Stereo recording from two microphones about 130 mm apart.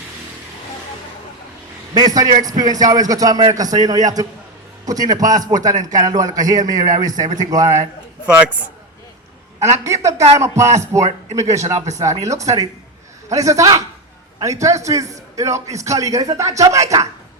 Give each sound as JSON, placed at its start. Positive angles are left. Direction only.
{"t": 1.9, "sound": "a man's voice", "side_deg": -30}
{"t": 9.6, "sound": "a man's voice", "side_deg": -25}
{"t": 11.0, "sound": "speech", "side_deg": -60}
{"t": 11.5, "sound": "a man's voice", "side_deg": -25}